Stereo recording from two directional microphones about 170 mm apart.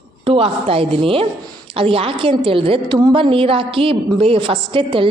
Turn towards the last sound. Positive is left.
turn(degrees=-30)  # may be behind; listen again after turning